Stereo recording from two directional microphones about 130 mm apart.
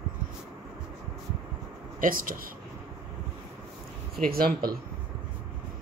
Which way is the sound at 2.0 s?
90° right.